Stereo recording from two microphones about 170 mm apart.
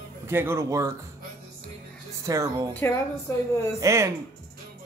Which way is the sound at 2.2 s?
20° right (ahead or behind).